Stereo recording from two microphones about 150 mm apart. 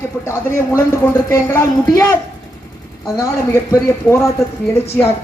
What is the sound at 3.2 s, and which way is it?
Speech, 20° left (ahead or behind).